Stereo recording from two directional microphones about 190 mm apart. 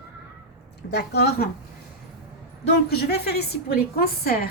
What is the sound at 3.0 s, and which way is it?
Speech, 55° left (ahead or behind).